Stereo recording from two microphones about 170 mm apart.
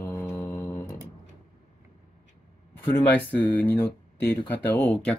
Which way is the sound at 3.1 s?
10° left (ahead or behind).